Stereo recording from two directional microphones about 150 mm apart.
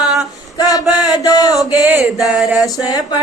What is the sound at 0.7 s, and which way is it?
Chant, 25° left (ahead or behind).